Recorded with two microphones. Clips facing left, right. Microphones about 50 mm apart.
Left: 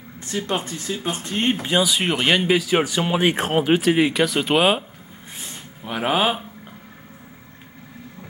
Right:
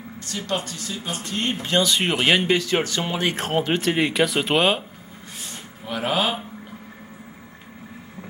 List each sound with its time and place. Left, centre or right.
0.3 s speech: left
1.7 s speech: centre
5.9 s speech: centre